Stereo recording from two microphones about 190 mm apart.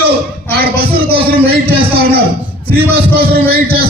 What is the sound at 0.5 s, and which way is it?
A man's voice, 55° right (ahead or behind).